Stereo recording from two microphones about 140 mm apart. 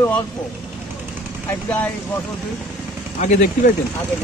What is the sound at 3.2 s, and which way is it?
Speech, 60° left (ahead or behind).